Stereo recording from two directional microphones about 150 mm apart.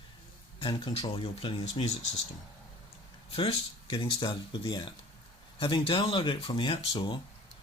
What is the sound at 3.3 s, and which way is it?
Speech, 40° left (ahead or behind).